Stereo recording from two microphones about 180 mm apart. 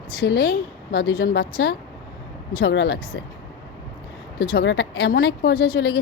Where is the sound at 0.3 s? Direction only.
60° left (ahead or behind).